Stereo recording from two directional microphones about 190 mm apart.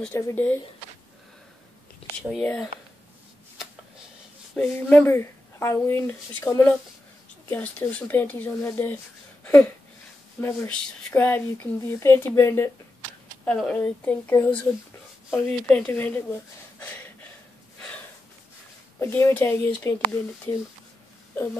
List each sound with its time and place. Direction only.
0.0 s speech: 10° left (ahead or behind)
2.2 s speech: 5° left (ahead or behind)
4.6 s speech: 10° left (ahead or behind)
9.4 s a sound: 10° left (ahead or behind)
10.4 s speech: 10° left (ahead or behind)
16.8 s a sound: 10° left (ahead or behind)
18.9 s speech: 15° left (ahead or behind)